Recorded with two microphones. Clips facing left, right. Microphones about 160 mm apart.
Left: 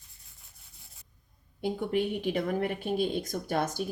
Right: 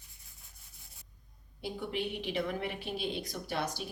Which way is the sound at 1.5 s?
50° left (ahead or behind).